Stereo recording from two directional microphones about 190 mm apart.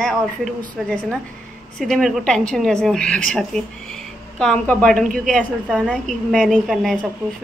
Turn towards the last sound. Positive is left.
turn(degrees=0)  # may be behind; listen again after turning